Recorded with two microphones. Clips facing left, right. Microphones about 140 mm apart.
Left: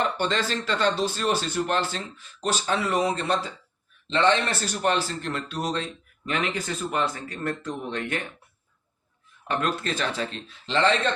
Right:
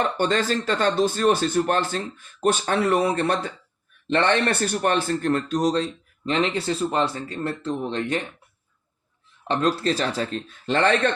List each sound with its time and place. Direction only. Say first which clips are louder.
0.0 s a man's voice: right 3 dB; 45° right (ahead or behind); by 8.0 s 30° right (ahead or behind)
9.5 s a man's voice: right 5 dB; 35° right (ahead or behind); by 11.1 s 55° right (ahead or behind)